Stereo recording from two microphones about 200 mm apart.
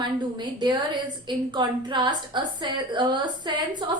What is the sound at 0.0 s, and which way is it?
A woman's voice, 20° right (ahead or behind).